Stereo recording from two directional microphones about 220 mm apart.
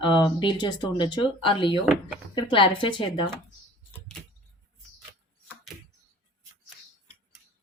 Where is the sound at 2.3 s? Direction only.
25° left (ahead or behind).